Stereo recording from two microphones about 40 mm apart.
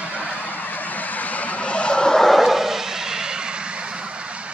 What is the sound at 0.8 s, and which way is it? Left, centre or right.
Vehicle, left.